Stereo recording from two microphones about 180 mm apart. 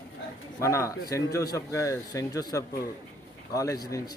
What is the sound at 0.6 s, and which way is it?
Speech, 15° left (ahead or behind).